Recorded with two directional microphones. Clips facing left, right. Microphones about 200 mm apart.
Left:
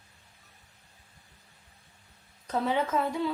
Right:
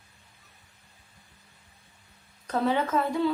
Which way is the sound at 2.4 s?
15° left (ahead or behind).